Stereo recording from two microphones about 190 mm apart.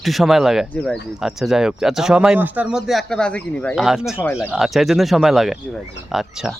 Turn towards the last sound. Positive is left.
turn(degrees=0)  # may be behind; listen again after turning